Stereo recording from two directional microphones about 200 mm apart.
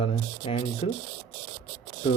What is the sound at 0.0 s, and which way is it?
Speech, 30° left (ahead or behind).